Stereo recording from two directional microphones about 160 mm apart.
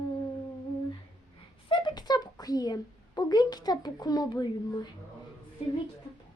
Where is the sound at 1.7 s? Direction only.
30° left (ahead or behind).